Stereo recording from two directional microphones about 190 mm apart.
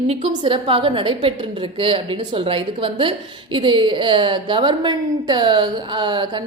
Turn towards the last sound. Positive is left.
turn(degrees=-25)  # may be behind; listen again after turning